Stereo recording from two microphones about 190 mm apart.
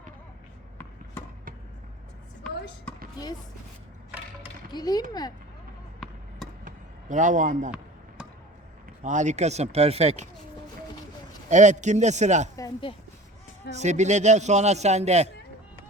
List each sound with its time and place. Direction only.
4.7 s speech: 20° left (ahead or behind)
6.7 s a sound: 40° right (ahead or behind)
9.0 s a man's voice: 40° right (ahead or behind)
11.4 s a man's voice: 40° right (ahead or behind)
12.5 s speech: 20° left (ahead or behind)
13.7 s a man's voice: 40° right (ahead or behind)